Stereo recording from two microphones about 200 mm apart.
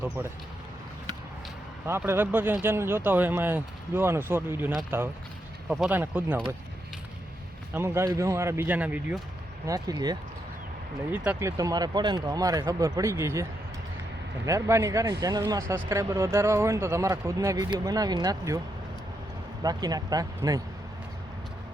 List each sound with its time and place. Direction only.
0.2 s speech: 10° right (ahead or behind)
1.9 s speech: 10° right (ahead or behind)
7.7 s speech: 10° right (ahead or behind)
11.1 s speech: 10° right (ahead or behind)
19.6 s speech: 20° right (ahead or behind)